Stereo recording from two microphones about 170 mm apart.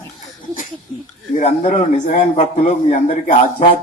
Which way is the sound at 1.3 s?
45° left (ahead or behind).